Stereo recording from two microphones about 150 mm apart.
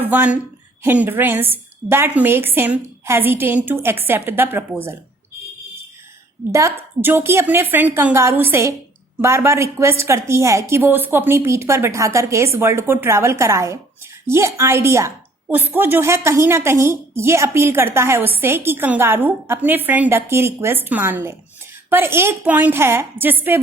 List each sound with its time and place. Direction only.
0.0 s a woman's voice: 10° right (ahead or behind)
6.5 s a woman's voice: 20° right (ahead or behind)